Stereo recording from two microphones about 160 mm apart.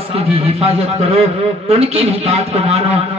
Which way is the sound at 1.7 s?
40° right (ahead or behind).